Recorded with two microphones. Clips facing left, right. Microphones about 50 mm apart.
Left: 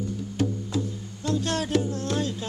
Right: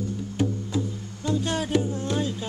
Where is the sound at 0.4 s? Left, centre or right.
Centre.